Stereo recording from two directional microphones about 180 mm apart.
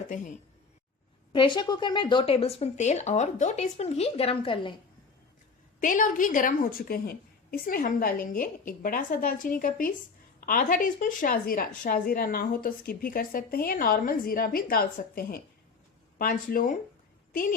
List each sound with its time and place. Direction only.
0.1 s a woman's voice: 45° left (ahead or behind)
1.3 s speech: 25° left (ahead or behind)
5.8 s a woman's voice: 45° left (ahead or behind)